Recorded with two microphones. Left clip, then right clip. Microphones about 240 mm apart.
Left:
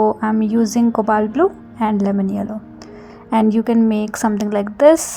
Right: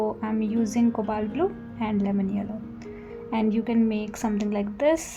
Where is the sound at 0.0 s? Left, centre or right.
Left.